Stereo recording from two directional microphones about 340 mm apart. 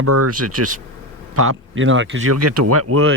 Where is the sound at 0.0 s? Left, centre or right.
Right.